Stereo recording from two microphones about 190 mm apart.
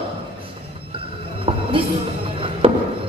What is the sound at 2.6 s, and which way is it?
Music, 30° right (ahead or behind).